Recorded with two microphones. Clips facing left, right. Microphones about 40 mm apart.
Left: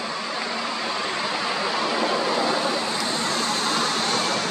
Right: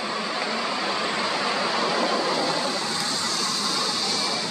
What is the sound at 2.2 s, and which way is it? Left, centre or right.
Vehicle, centre.